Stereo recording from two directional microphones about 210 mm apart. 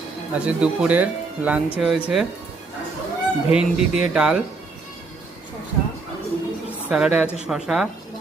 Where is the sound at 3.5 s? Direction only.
5° right (ahead or behind).